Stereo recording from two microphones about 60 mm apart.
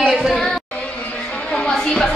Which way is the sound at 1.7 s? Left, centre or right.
Centre.